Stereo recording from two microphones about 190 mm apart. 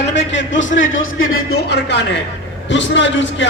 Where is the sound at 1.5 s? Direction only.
60° left (ahead or behind).